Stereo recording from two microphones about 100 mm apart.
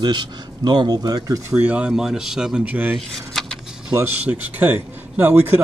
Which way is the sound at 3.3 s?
5° left (ahead or behind).